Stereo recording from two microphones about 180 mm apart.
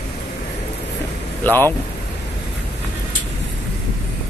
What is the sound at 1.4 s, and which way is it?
Speech, 10° left (ahead or behind).